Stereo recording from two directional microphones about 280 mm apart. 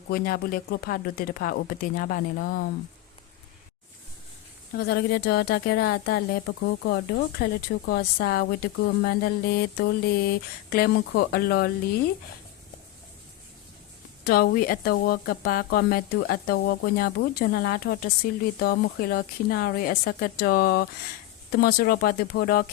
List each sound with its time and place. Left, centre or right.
0.1 s speech: left
4.8 s speech: left
14.3 s speech: left